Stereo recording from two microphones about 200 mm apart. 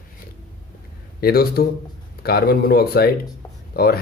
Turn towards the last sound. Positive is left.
turn(degrees=50)  # may be behind; listen again after turning